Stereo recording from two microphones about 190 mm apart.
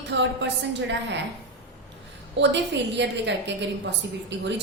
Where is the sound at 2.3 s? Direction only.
70° right (ahead or behind).